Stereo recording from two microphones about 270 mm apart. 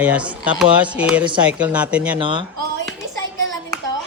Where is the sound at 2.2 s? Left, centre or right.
Centre.